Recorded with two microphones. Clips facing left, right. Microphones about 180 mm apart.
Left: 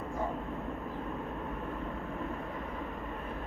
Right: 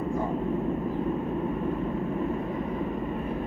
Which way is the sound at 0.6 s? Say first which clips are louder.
Right 10 dB; 15° right (ahead or behind).